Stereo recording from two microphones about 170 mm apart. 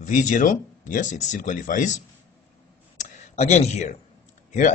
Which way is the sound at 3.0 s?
45° left (ahead or behind).